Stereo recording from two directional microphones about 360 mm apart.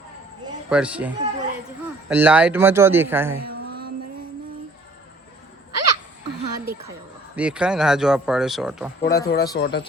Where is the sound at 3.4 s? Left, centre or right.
Right.